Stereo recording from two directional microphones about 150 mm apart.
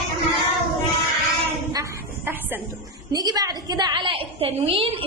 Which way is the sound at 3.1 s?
25° right (ahead or behind).